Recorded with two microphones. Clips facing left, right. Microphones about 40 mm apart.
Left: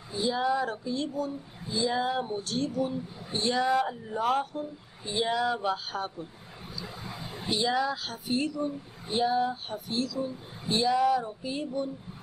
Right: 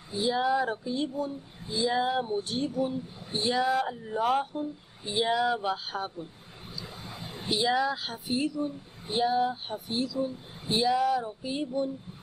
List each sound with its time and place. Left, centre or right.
0.1 s speech: centre
4.5 s speech: centre
7.4 s speech: centre
8.3 s a woman's voice: centre